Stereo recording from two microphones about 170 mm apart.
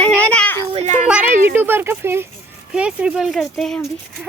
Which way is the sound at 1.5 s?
10° right (ahead or behind).